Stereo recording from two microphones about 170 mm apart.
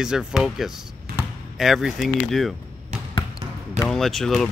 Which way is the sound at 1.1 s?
65° right (ahead or behind).